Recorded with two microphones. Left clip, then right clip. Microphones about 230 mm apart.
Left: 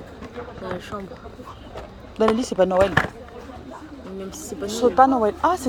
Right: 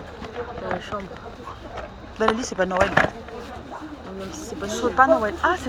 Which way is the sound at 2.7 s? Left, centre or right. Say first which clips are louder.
Even; left.